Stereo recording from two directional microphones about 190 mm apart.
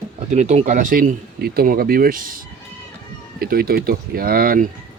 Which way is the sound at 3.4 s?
50° right (ahead or behind).